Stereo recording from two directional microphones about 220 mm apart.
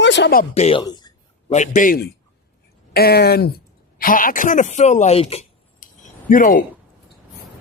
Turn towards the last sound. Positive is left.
turn(degrees=40)  # may be behind; listen again after turning